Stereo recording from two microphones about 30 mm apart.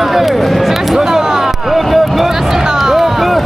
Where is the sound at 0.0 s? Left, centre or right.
Centre.